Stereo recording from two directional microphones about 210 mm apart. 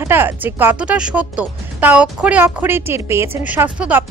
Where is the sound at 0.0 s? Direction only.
10° right (ahead or behind).